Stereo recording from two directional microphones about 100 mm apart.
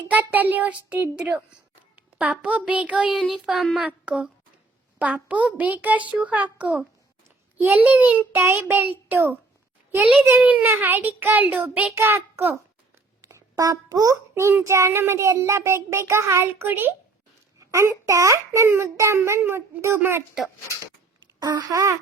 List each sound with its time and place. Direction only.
0.1 s a child's voice: 15° right (ahead or behind)
3.1 s child singing: centre (ahead or behind)
3.8 s a child's voice: 10° right (ahead or behind)
13.2 s a child's voice: 35° right (ahead or behind)
21.2 s speech: 45° right (ahead or behind)